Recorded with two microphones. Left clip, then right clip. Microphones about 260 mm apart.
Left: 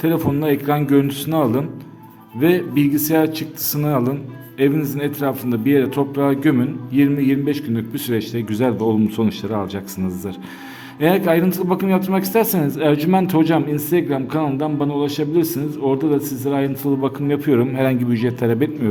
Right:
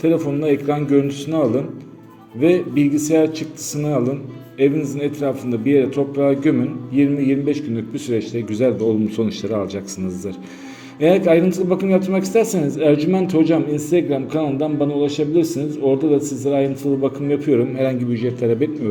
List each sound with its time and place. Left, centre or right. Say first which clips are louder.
0.0 s a man's voice: right 1 dB; left
11.0 s a man's voice: right 2 dB; centre